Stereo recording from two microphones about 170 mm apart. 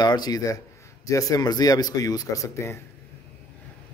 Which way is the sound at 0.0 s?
25° left (ahead or behind).